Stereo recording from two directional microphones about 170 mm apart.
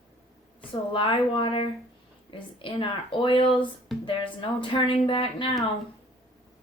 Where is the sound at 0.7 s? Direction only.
30° left (ahead or behind).